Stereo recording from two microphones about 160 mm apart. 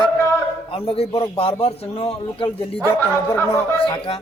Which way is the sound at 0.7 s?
35° left (ahead or behind).